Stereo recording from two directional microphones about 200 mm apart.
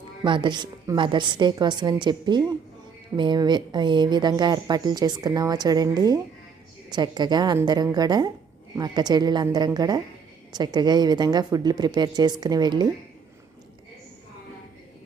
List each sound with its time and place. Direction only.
0.3 s speech: 25° right (ahead or behind)